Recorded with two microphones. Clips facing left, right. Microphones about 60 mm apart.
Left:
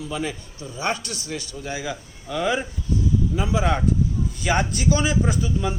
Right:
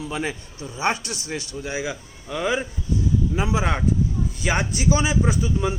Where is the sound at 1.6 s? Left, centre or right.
Centre.